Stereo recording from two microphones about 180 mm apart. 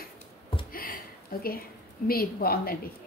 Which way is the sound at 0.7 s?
55° left (ahead or behind).